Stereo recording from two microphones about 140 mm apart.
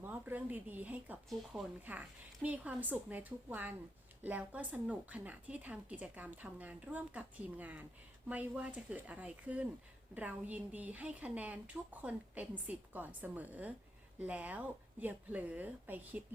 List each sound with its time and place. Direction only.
0.0 s a woman's voice: 15° right (ahead or behind)